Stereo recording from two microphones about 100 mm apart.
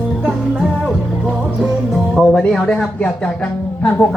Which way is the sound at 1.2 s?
Centre (ahead or behind).